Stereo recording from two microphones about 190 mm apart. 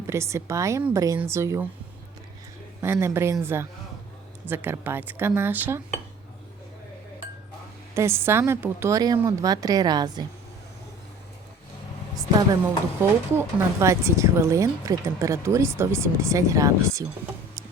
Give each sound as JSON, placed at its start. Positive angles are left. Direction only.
{"t": 0.1, "sound": "speech", "side_deg": -15}
{"t": 2.8, "sound": "speech", "side_deg": -15}
{"t": 7.9, "sound": "a woman's voice", "side_deg": -15}
{"t": 13.0, "sound": "speech", "side_deg": -15}